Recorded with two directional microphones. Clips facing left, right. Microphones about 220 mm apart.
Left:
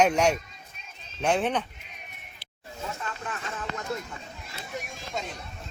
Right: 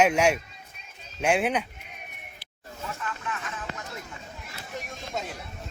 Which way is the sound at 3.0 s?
35° left (ahead or behind).